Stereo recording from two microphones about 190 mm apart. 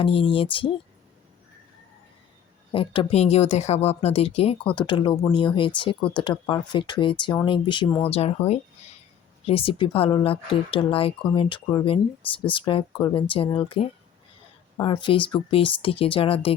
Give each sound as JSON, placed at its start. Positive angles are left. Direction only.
{"t": 0.0, "sound": "speech", "side_deg": 30}
{"t": 2.7, "sound": "speech", "side_deg": 30}